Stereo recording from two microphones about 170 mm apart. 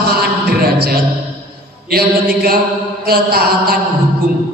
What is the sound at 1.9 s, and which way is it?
A man's voice, 60° right (ahead or behind).